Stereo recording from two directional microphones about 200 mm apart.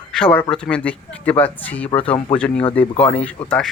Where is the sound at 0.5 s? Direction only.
5° left (ahead or behind).